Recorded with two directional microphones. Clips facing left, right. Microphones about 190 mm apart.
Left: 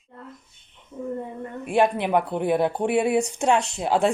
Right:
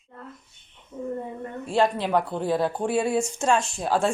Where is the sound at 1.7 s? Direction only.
15° left (ahead or behind).